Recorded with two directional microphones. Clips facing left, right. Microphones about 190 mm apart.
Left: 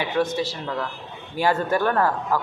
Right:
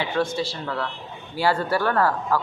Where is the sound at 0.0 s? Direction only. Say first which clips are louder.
Left 1 dB; 20° left (ahead or behind).